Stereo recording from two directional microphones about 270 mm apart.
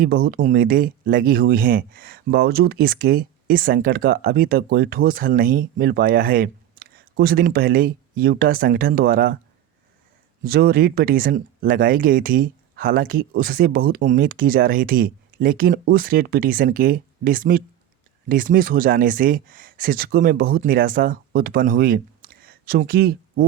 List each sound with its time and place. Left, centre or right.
0.0 s speech: right
10.4 s speech: right